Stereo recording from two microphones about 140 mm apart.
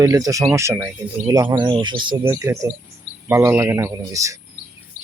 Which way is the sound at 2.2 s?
20° right (ahead or behind).